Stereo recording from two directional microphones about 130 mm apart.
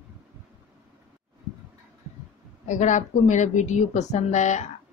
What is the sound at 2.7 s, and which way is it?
A woman's voice, 70° left (ahead or behind).